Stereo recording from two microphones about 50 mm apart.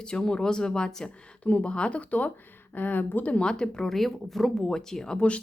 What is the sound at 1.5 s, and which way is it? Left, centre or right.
Speech, left.